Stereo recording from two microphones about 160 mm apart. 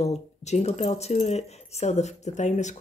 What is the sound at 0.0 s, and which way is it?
Speech, 40° left (ahead or behind).